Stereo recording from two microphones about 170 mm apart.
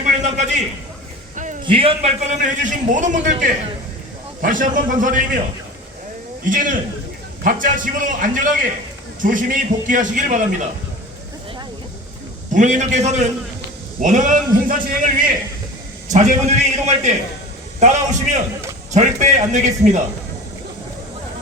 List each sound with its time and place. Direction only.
0.0 s a sound: 45° right (ahead or behind)
1.6 s a man's voice: 30° right (ahead or behind); by 5.4 s 50° right (ahead or behind)
6.4 s a man's voice: 50° right (ahead or behind)
12.5 s a man's voice: 45° right (ahead or behind)